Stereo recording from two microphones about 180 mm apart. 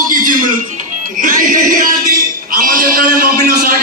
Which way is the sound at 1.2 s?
50° right (ahead or behind).